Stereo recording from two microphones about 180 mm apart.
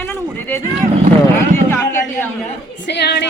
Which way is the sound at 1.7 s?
10° left (ahead or behind).